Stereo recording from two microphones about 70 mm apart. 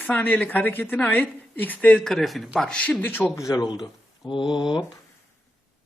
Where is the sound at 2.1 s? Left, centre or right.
Centre.